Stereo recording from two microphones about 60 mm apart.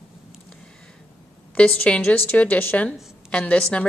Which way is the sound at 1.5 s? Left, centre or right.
Centre.